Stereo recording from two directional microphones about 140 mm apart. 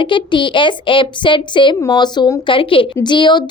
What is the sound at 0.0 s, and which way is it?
A woman's voice, 35° left (ahead or behind).